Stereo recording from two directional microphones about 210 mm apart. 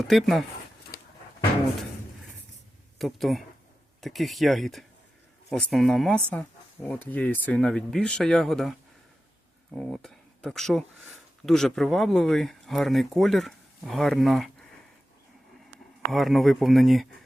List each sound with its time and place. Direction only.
0.1 s speech: centre (ahead or behind)
0.9 s a sound: 50° left (ahead or behind)
3.0 s speech: centre (ahead or behind)
9.7 s speech: centre (ahead or behind)
16.1 s speech: centre (ahead or behind)